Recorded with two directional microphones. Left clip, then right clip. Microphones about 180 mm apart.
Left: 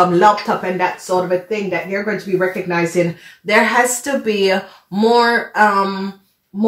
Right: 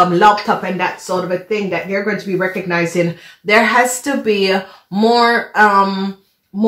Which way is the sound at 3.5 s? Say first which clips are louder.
Right 2 dB; 25° right (ahead or behind).